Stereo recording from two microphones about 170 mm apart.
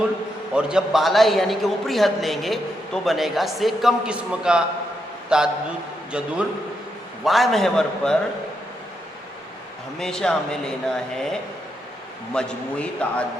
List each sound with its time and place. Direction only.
0.5 s a man's voice: 5° right (ahead or behind)
10.0 s a man's voice: 5° left (ahead or behind)